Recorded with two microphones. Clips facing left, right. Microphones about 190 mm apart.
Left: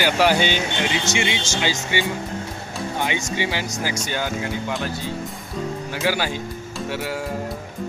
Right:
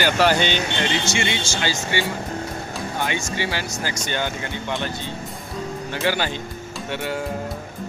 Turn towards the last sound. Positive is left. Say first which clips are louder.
# even
turn(degrees=5)  # may be behind; listen again after turning